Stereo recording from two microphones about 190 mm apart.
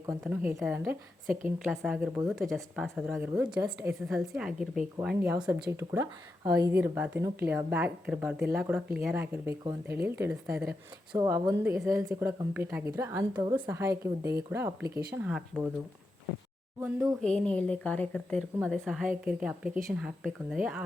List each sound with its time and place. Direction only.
0.3 s a woman's voice: 5° right (ahead or behind)
17.2 s a woman's voice: 5° left (ahead or behind)